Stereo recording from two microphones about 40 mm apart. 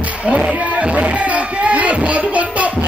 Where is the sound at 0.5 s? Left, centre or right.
Right.